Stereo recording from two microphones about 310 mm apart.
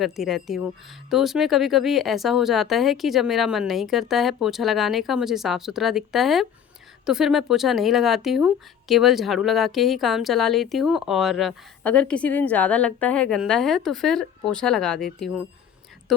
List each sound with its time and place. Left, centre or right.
0.0 s speech: centre